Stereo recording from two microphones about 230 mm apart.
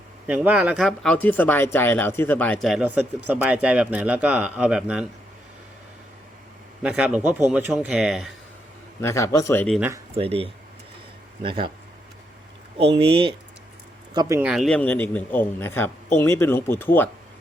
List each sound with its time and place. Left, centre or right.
0.3 s speech: centre
6.8 s speech: centre
9.0 s speech: centre
9.7 s speech: centre
10.2 s speech: right
12.7 s speech: right; by 17.1 s centre